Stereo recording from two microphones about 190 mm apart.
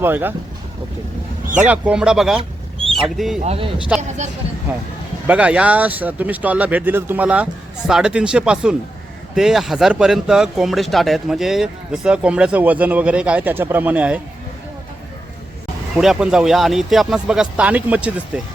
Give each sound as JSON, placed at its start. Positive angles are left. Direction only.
{"t": 0.0, "sound": "speech", "side_deg": -10}
{"t": 1.6, "sound": "speech", "side_deg": -5}
{"t": 2.4, "sound": "a sound", "side_deg": -30}
{"t": 3.2, "sound": "speech", "side_deg": 0}
{"t": 3.4, "sound": "speech", "side_deg": -30}
{"t": 4.7, "sound": "speech", "side_deg": -10}
{"t": 16.0, "sound": "speech", "side_deg": -5}